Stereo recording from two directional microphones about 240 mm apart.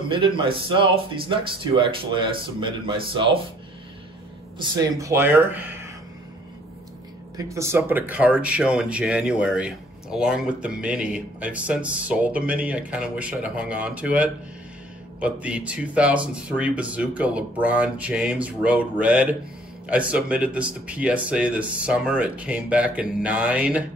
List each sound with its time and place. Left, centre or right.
0.1 s speech: right
4.6 s speech: centre
7.3 s speech: centre